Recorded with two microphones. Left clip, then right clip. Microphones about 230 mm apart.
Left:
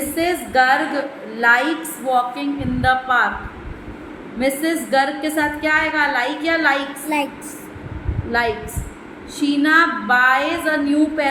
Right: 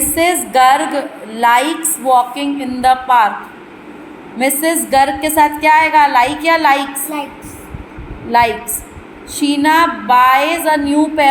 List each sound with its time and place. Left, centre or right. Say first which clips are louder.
0.2 s a woman's voice: right 6 dB; right
4.4 s a woman's voice: right 5 dB; centre
8.3 s a woman's voice: right 8 dB; centre